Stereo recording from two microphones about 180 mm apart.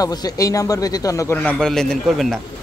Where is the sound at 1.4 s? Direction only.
5° left (ahead or behind).